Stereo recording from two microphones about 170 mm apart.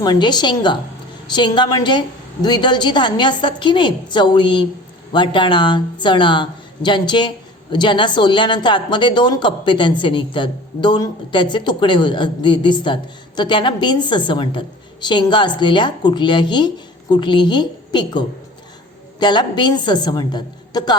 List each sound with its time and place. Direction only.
0.0 s speech: 25° left (ahead or behind)